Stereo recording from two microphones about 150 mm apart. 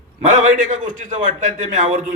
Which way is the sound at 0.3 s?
55° right (ahead or behind).